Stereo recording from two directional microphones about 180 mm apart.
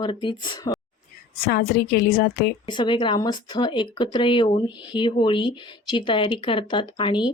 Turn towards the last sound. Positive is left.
turn(degrees=25)  # may be behind; listen again after turning